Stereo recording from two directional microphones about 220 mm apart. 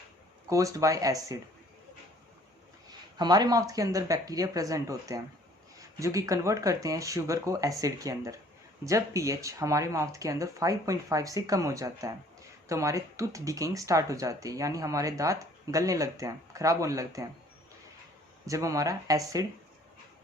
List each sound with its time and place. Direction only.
0.5 s speech: 15° right (ahead or behind)
3.2 s speech: 20° right (ahead or behind)
18.4 s speech: 15° right (ahead or behind)